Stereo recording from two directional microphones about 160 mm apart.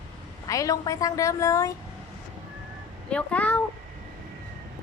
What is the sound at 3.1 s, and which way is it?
Speech, 5° left (ahead or behind).